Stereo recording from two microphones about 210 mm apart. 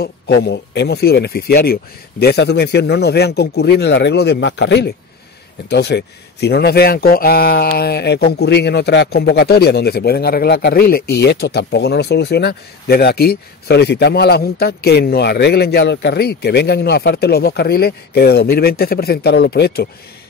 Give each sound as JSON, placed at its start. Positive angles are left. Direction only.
{"t": 0.0, "sound": "speech", "side_deg": 50}